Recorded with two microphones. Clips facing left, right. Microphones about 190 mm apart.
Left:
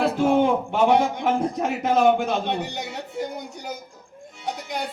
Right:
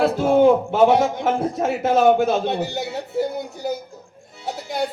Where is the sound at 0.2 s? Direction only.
40° right (ahead or behind).